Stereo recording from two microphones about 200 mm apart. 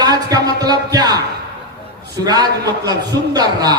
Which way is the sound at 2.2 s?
20° right (ahead or behind).